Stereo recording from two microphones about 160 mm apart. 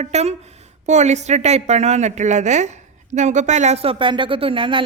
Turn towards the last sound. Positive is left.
turn(degrees=-35)  # may be behind; listen again after turning